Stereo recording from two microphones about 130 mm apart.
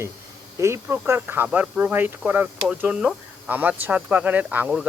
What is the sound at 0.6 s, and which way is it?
Speech, 20° right (ahead or behind).